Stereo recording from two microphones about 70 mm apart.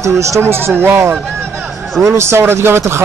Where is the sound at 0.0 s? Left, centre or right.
Right.